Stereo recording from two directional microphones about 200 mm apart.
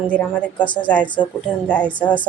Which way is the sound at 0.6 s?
25° left (ahead or behind).